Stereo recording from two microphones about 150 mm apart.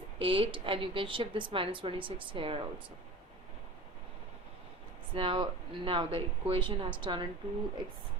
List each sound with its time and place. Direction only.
0.2 s a woman's voice: 35° right (ahead or behind)
5.1 s a woman's voice: 35° right (ahead or behind)